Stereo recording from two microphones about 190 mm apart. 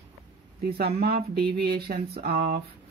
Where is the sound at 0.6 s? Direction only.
55° right (ahead or behind).